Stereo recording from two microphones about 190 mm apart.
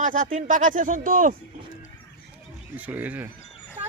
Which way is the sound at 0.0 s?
45° right (ahead or behind).